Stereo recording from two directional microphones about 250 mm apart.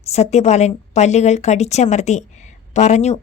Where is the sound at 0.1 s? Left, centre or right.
Left.